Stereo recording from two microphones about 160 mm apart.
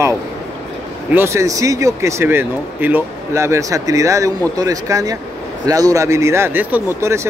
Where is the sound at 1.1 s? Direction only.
15° right (ahead or behind).